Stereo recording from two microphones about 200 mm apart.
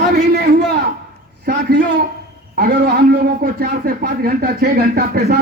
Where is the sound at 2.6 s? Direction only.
50° right (ahead or behind).